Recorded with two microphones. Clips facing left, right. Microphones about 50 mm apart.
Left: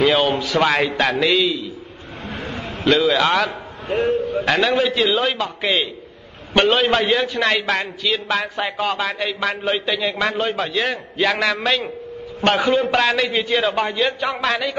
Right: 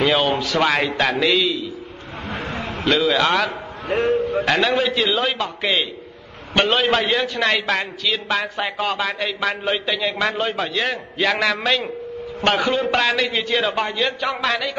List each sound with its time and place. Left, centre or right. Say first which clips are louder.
0.0 s a man's voice: left 1 dB; centre
2.2 s a sound: right 1 dB; right
2.8 s a man's voice: left 2 dB; centre
3.9 s a man's voice: even; right
4.5 s a man's voice: left 2 dB; centre